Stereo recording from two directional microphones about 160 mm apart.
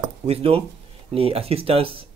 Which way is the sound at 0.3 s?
35° right (ahead or behind).